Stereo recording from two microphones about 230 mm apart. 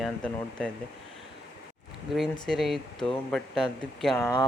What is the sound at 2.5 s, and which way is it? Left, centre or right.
Speech, centre.